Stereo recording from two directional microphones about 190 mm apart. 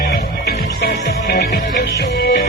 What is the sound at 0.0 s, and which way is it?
Music, 55° left (ahead or behind).